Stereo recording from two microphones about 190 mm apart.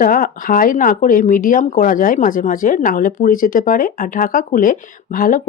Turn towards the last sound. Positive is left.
turn(degrees=45)  # may be behind; listen again after turning